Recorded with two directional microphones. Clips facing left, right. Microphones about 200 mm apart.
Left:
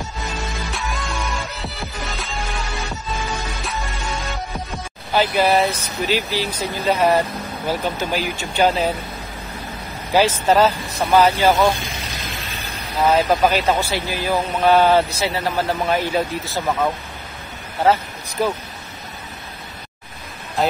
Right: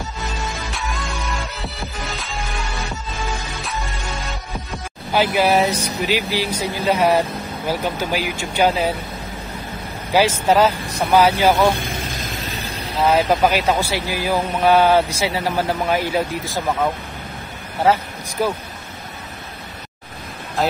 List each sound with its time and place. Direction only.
0.7 s music: centre (ahead or behind)
5.1 s speech: 10° right (ahead or behind)
10.1 s speech: 10° right (ahead or behind)
13.0 s speech: centre (ahead or behind)
13.5 s speech: 10° right (ahead or behind)
17.9 s speech: 10° right (ahead or behind)